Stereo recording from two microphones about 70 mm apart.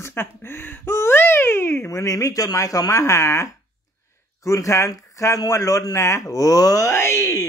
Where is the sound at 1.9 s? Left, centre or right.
Left.